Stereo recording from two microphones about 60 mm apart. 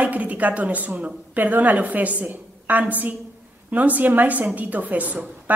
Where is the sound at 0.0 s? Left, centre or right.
Right.